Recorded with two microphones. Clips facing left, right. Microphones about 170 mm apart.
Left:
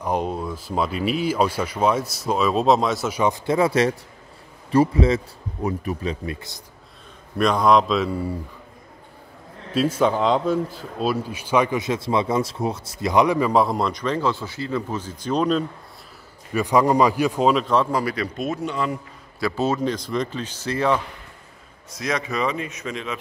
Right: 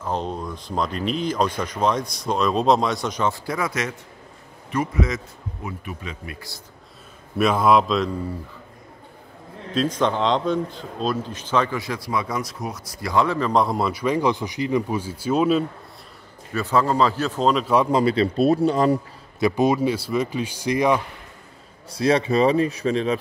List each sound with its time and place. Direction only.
0.0 s a man's voice: 10° left (ahead or behind); by 6.3 s 35° left (ahead or behind)
7.3 s speech: 5° right (ahead or behind)
9.8 s speech: 5° left (ahead or behind)
16.5 s speech: 15° left (ahead or behind)
17.9 s speech: 25° right (ahead or behind)
19.4 s speech: 15° right (ahead or behind)
21.9 s speech: 30° right (ahead or behind)